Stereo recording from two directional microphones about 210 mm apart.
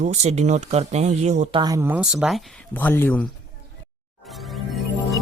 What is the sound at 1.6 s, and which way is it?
Speech, 15° right (ahead or behind).